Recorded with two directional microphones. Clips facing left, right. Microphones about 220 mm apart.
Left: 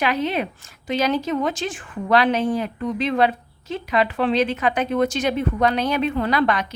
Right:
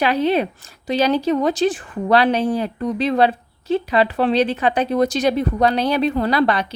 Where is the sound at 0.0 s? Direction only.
35° right (ahead or behind).